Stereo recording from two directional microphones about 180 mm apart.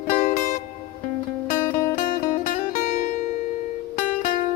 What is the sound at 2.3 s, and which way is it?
Music, 45° left (ahead or behind).